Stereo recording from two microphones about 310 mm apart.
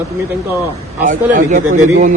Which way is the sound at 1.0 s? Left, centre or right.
Right.